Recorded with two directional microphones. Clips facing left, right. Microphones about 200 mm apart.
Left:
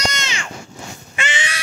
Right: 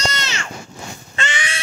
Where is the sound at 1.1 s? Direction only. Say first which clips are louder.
Even; 20° left (ahead or behind).